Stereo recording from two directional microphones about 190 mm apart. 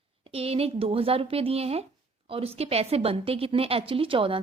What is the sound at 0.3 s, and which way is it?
A woman's voice, 30° right (ahead or behind).